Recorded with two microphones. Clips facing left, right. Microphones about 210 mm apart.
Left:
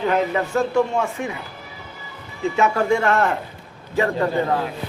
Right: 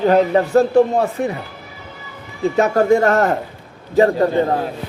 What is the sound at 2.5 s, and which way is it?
A man's voice, 40° right (ahead or behind).